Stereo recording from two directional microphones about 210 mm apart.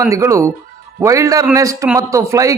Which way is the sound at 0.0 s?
15° right (ahead or behind).